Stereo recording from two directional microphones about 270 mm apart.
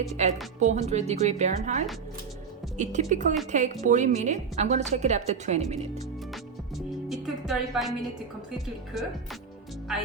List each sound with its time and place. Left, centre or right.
0.2 s a woman's voice: right
6.3 s music: centre